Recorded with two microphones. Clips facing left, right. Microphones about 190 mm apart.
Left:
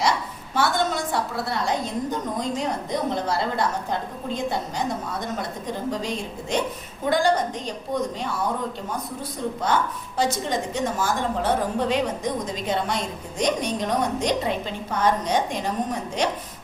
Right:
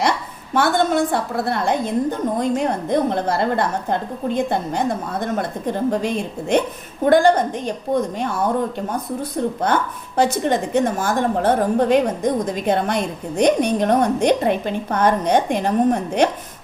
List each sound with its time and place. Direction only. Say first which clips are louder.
0.5 s a woman's voice: right 6 dB; 55° right (ahead or behind)
9.6 s a woman's voice: right 3 dB; 60° right (ahead or behind)